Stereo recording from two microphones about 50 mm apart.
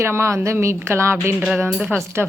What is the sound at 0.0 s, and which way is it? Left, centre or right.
A woman's voice, right.